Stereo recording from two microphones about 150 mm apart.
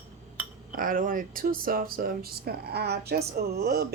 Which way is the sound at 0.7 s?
65° right (ahead or behind).